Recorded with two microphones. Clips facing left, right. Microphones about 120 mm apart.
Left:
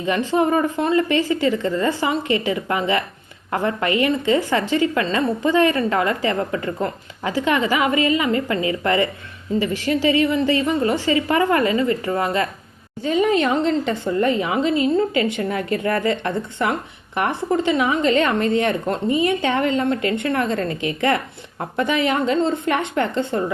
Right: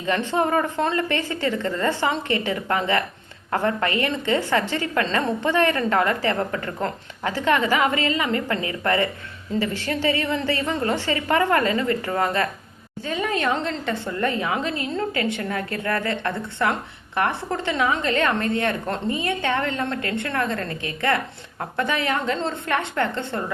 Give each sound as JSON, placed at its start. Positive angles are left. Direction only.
{"t": 0.0, "sound": "a woman's voice", "side_deg": 15}